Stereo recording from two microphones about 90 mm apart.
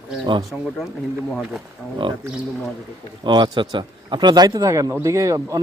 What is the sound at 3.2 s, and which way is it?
A man's voice, 60° right (ahead or behind).